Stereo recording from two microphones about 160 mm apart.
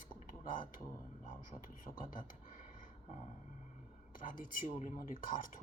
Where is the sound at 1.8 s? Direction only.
60° left (ahead or behind).